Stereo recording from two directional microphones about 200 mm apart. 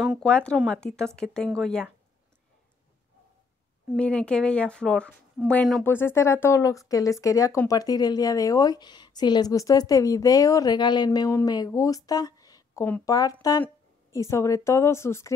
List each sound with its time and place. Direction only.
0.0 s a woman's voice: centre (ahead or behind)
3.9 s a woman's voice: 5° left (ahead or behind)